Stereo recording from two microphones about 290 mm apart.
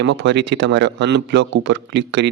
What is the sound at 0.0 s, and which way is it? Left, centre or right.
Speech, right.